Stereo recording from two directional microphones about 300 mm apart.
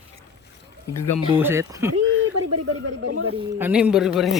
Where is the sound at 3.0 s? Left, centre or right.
Right.